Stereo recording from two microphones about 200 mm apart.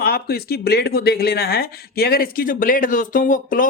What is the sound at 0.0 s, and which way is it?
Speech, 50° left (ahead or behind).